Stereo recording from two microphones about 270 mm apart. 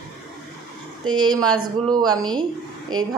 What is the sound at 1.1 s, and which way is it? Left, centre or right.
Speech, centre.